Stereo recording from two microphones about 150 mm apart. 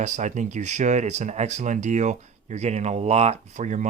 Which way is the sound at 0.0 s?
50° right (ahead or behind).